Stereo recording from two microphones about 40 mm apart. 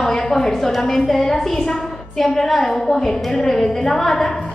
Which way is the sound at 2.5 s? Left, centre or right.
Centre.